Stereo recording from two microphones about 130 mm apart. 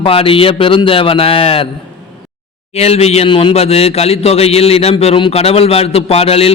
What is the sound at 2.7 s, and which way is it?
A man's voice, 55° left (ahead or behind).